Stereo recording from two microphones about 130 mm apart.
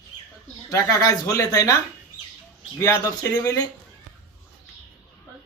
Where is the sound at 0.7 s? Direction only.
25° left (ahead or behind).